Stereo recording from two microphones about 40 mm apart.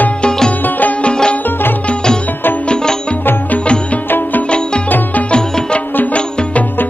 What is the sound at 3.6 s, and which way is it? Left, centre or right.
Music, left.